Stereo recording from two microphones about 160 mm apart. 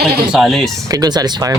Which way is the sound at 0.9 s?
25° right (ahead or behind).